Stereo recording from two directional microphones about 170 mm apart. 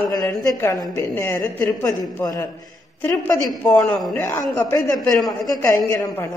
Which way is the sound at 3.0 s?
15° left (ahead or behind).